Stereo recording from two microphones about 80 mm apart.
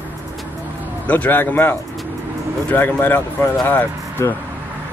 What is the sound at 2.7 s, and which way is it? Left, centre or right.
Speech, left.